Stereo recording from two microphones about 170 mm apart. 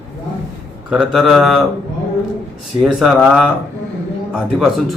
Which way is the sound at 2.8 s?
5° right (ahead or behind).